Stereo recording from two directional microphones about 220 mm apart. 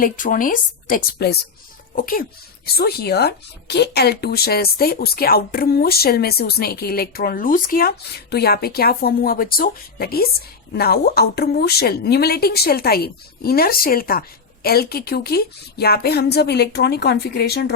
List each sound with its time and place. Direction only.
0.0 s speech: 40° left (ahead or behind)